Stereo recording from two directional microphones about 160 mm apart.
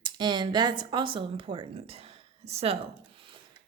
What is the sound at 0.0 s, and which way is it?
Speech, 30° right (ahead or behind).